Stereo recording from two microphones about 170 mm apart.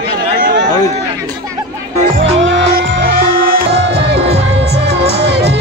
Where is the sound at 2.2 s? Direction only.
90° right; by 4.0 s 60° right (ahead or behind).